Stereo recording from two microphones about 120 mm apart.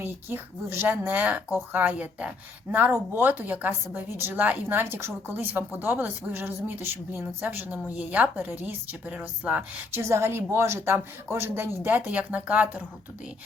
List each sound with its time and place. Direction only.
0.0 s a woman's voice: 20° right (ahead or behind)
10.0 s a woman's voice: 20° right (ahead or behind)